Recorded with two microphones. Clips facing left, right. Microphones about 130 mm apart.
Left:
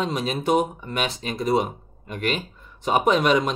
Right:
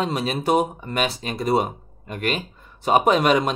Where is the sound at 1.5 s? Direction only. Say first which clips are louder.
Right 1 dB; 45° right (ahead or behind).